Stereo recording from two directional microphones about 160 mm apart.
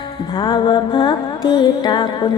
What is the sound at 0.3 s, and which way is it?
Music, 30° left (ahead or behind).